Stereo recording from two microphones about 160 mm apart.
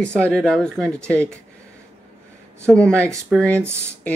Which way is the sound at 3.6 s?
15° right (ahead or behind).